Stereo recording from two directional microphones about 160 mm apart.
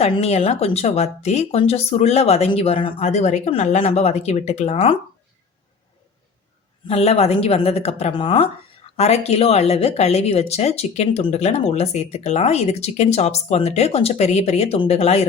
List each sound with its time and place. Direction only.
0.0 s speech: 40° left (ahead or behind)
6.8 s speech: 40° left (ahead or behind)